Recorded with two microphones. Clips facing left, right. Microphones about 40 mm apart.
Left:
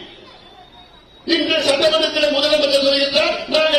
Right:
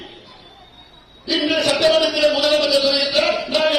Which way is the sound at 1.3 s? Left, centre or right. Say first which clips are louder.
Left 2 dB; left.